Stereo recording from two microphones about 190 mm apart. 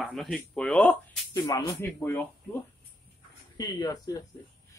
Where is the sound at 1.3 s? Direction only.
20° left (ahead or behind).